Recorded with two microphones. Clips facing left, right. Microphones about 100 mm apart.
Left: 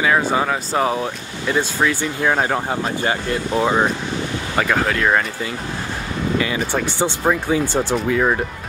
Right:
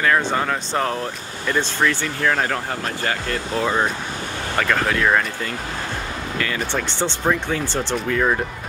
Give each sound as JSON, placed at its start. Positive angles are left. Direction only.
{"t": 0.0, "sound": "speech", "side_deg": 10}